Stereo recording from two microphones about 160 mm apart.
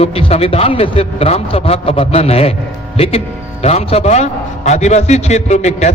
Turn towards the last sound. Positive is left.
turn(degrees=45)  # may be behind; listen again after turning